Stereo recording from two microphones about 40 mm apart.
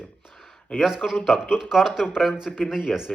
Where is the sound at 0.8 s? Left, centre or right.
Centre.